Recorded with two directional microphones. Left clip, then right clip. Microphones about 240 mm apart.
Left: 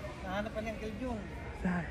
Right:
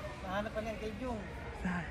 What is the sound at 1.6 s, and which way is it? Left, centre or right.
Speech, centre.